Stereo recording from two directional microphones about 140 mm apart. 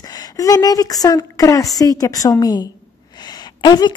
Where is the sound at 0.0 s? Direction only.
25° left (ahead or behind).